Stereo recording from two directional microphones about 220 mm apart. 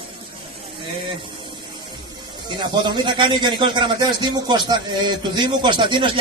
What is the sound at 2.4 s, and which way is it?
A man's voice, 20° right (ahead or behind).